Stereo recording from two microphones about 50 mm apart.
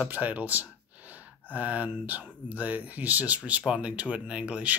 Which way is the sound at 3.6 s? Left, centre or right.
Right.